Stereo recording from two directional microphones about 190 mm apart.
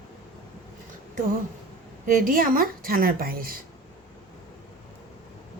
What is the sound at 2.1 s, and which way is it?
A woman's voice, 50° right (ahead or behind).